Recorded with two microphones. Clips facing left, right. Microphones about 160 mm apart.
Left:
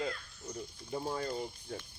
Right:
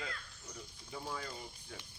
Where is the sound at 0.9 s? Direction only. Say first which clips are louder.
Left 8 dB; 40° left (ahead or behind).